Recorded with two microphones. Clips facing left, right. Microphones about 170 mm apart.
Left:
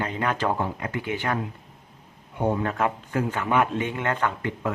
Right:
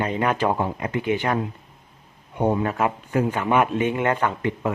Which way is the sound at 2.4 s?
15° right (ahead or behind).